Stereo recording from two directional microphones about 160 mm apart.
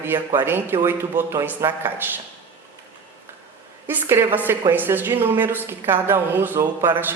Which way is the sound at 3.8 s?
15° right (ahead or behind).